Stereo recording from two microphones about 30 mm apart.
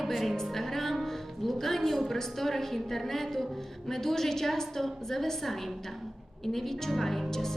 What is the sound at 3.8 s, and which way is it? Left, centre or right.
A woman's voice, centre.